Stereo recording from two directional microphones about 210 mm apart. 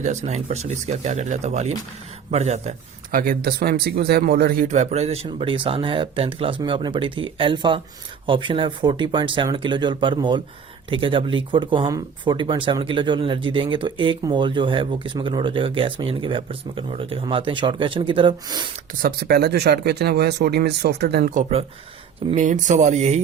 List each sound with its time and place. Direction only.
0.0 s speech: 35° right (ahead or behind)
19.0 s speech: 45° right (ahead or behind); by 23.2 s 30° right (ahead or behind)